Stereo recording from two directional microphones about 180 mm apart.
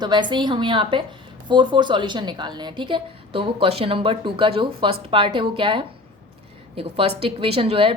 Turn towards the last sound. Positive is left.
turn(degrees=-30)  # may be behind; listen again after turning